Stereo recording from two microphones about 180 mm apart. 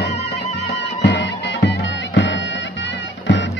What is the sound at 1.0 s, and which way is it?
Music, 75° left (ahead or behind).